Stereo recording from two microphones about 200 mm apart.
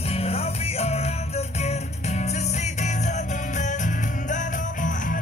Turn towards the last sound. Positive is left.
turn(degrees=40)  # may be behind; listen again after turning